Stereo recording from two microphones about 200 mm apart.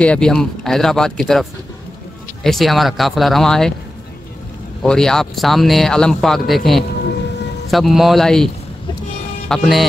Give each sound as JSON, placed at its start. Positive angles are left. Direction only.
{"t": 0.0, "sound": "speech", "side_deg": 5}
{"t": 4.8, "sound": "speech", "side_deg": 5}
{"t": 9.5, "sound": "speech", "side_deg": 0}